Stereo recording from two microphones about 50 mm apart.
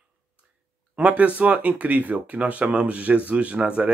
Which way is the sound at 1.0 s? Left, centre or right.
Right.